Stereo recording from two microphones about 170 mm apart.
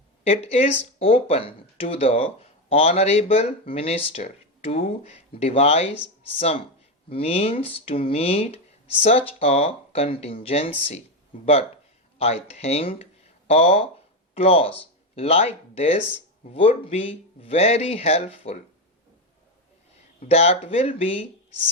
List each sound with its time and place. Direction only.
0.3 s speech: 35° left (ahead or behind)
7.1 s speech: 35° left (ahead or behind)
12.2 s speech: 35° left (ahead or behind)
20.1 s speech: 35° left (ahead or behind)